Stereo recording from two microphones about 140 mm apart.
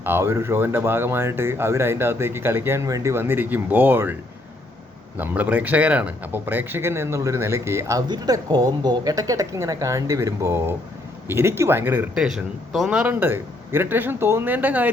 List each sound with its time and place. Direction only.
0.0 s speech: 15° right (ahead or behind)
5.1 s speech: 10° right (ahead or behind)